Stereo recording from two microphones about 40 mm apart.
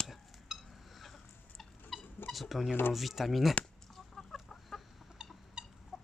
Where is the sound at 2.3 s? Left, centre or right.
Centre.